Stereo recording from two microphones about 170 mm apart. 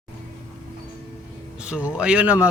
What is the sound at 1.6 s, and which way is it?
Speech, 5° right (ahead or behind).